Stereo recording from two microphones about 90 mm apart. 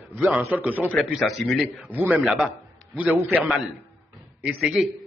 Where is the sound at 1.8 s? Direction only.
20° right (ahead or behind).